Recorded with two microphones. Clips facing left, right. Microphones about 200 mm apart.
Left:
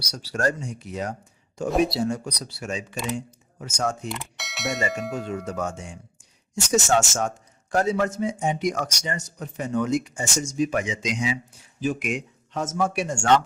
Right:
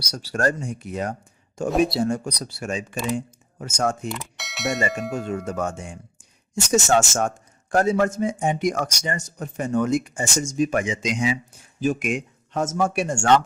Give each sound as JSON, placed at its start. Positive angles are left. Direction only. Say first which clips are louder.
{"t": 0.1, "sound": "a man's voice", "louder": "right 2 dB", "side_deg": -50}
{"t": 4.1, "sound": "mechanisms", "louder": "right 1 dB", "side_deg": 0}
{"t": 5.5, "sound": "a man's voice", "louder": "right 2 dB", "side_deg": -50}